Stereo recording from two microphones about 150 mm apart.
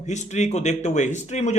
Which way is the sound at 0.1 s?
50° left (ahead or behind).